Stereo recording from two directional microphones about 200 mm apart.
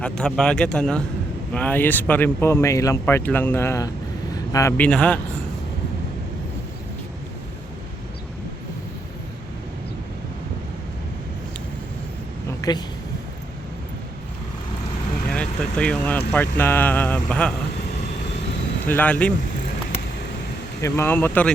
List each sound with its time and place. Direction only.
0.0 s speech: 5° left (ahead or behind)
12.5 s a sound: 20° left (ahead or behind)
15.3 s speech: 5° left (ahead or behind)
18.9 s speech: 10° left (ahead or behind)
20.8 s speech: 10° left (ahead or behind)